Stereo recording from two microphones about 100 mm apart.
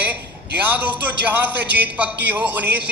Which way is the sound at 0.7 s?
15° right (ahead or behind).